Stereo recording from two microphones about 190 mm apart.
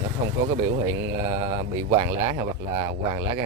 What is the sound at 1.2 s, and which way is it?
Mantra, 20° right (ahead or behind).